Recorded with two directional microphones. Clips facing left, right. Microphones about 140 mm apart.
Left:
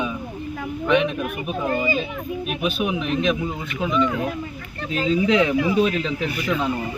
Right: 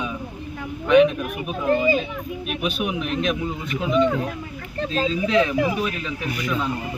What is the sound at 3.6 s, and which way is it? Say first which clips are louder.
Speech: right 3 dB; 35° right (ahead or behind).